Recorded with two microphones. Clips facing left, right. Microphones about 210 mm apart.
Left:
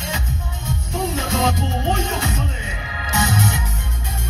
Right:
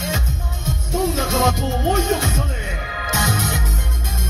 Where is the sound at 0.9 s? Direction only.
45° right (ahead or behind).